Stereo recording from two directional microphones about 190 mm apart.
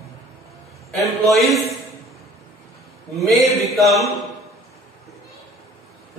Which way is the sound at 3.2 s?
Centre (ahead or behind).